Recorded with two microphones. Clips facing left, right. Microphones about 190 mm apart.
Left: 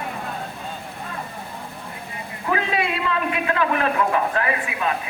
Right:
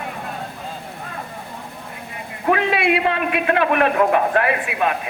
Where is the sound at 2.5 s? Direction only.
65° right (ahead or behind).